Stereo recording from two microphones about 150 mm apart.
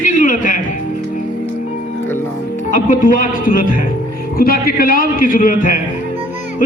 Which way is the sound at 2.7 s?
65° left (ahead or behind).